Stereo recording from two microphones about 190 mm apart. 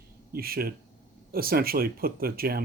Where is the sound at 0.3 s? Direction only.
50° right (ahead or behind).